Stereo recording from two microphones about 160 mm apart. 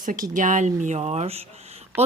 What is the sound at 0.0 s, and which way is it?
A woman's voice, 55° right (ahead or behind).